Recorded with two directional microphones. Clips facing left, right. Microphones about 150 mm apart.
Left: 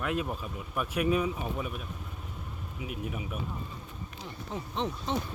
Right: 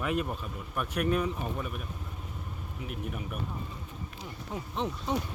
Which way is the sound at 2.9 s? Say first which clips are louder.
Left 1 dB; 5° left (ahead or behind).